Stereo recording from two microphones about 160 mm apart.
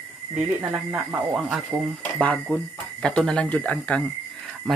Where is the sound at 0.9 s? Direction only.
15° right (ahead or behind).